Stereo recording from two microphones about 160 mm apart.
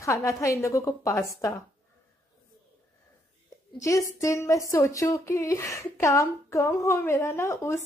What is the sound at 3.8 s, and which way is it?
A woman's voice, 20° left (ahead or behind).